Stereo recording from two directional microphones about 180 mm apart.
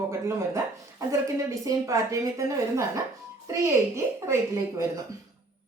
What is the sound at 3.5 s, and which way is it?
Speech, 15° right (ahead or behind).